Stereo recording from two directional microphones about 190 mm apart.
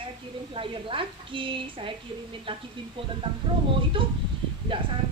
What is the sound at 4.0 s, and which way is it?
Speech, 25° right (ahead or behind).